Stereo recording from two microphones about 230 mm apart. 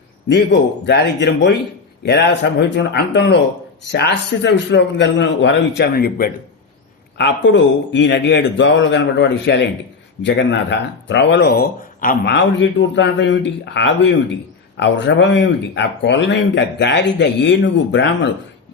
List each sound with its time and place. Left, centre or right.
0.9 s speech: left
7.2 s speech: left
12.3 s speech: left